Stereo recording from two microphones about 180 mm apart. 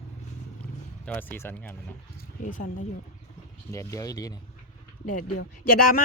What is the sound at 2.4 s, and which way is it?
Speech, 45° left (ahead or behind).